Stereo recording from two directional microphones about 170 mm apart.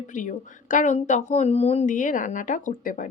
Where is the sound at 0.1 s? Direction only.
50° left (ahead or behind).